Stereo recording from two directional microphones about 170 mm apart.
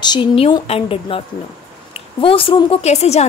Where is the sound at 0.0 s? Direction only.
25° left (ahead or behind).